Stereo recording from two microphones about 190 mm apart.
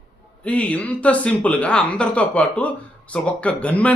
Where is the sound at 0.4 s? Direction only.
5° left (ahead or behind).